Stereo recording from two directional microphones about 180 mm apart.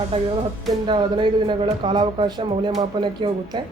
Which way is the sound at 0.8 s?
25° right (ahead or behind).